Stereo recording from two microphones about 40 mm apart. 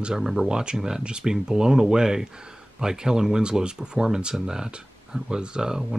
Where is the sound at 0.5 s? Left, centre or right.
Centre.